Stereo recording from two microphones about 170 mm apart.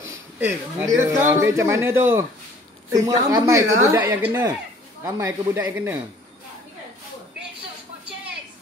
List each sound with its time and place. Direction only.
0.1 s a man's voice: 15° right (ahead or behind)